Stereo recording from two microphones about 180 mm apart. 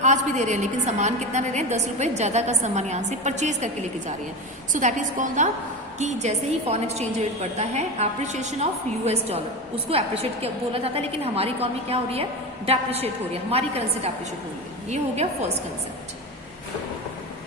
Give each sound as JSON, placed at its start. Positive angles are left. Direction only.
{"t": 0.0, "sound": "a woman's voice", "side_deg": -40}
{"t": 4.7, "sound": "a woman's voice", "side_deg": -45}